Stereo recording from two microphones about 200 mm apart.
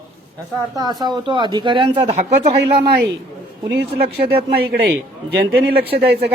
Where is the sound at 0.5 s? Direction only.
20° right (ahead or behind).